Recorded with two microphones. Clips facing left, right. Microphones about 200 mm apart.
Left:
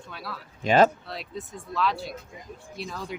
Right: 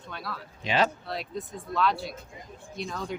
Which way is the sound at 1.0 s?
Centre (ahead or behind).